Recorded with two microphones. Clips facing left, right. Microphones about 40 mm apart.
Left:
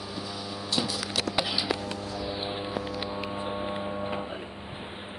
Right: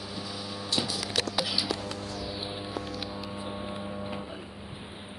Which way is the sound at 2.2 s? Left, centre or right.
Left.